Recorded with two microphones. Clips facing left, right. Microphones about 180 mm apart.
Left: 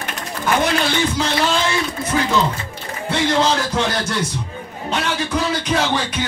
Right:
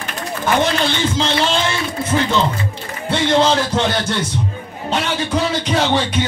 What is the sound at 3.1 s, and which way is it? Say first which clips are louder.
Speech: right 3 dB; 30° right (ahead or behind).